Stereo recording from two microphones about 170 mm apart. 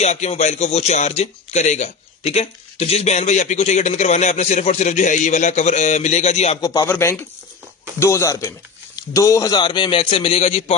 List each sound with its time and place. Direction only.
0.0 s speech: 40° left (ahead or behind)
6.6 s speech: 20° left (ahead or behind)